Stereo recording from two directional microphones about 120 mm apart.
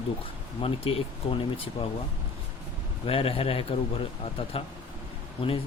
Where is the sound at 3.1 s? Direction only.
50° left (ahead or behind).